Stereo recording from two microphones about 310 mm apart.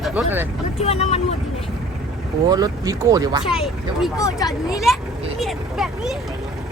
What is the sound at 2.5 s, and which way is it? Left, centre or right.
Speech, centre.